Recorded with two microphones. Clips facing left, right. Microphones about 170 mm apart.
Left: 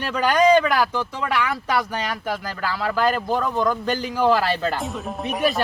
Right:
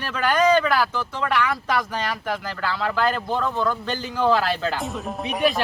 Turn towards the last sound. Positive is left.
turn(degrees=0)  # may be behind; listen again after turning